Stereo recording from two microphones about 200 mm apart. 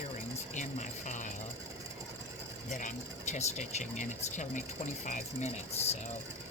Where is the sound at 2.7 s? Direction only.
35° left (ahead or behind).